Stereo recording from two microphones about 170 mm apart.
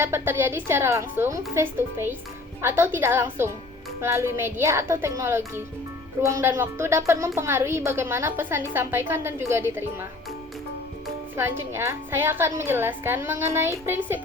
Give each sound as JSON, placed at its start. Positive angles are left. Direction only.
{"t": 0.0, "sound": "speech", "side_deg": -15}
{"t": 11.3, "sound": "speech", "side_deg": -15}